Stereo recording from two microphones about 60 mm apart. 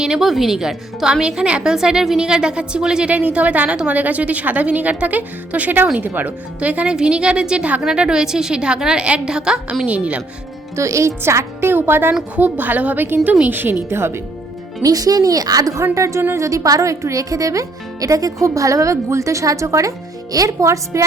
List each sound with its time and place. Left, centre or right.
0.0 s a woman's voice: centre
10.8 s speech: right
14.8 s a woman's voice: right